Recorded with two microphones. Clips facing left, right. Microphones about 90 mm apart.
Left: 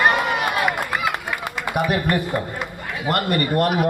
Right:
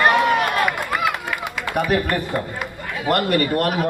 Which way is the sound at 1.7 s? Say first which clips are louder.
Right 2 dB; 10° left (ahead or behind).